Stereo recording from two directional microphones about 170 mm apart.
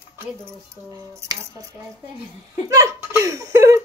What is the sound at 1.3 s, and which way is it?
Speech, 15° right (ahead or behind).